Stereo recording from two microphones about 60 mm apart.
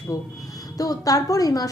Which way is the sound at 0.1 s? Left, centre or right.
Left.